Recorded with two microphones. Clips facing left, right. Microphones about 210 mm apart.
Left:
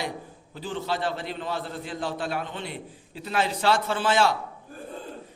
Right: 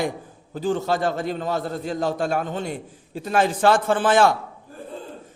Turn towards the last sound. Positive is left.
turn(degrees=-50)  # may be behind; listen again after turning